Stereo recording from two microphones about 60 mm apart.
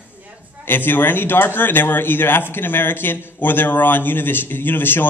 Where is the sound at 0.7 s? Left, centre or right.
Left.